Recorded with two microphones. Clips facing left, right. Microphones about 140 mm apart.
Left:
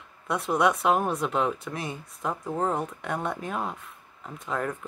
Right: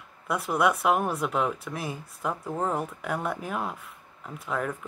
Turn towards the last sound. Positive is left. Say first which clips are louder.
# even
turn(degrees=-5)  # may be behind; listen again after turning